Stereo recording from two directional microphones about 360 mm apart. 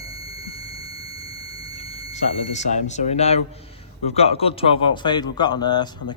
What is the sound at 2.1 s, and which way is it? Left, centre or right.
Speech, centre.